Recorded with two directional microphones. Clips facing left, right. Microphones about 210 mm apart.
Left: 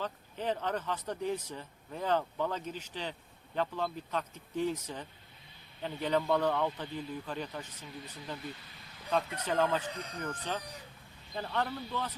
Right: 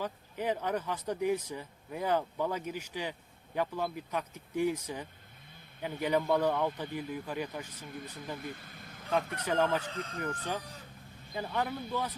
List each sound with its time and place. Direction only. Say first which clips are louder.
0.0 s speech: right 1 dB; 10° right (ahead or behind)
7.9 s speech: right 3 dB; 55° right (ahead or behind)
8.4 s a sound: right 2 dB; 50° right (ahead or behind)
9.4 s speech: right 1 dB; 10° right (ahead or behind)
9.9 s speech: right 3 dB; 15° left (ahead or behind)
10.2 s speech: left 1 dB; 10° right (ahead or behind)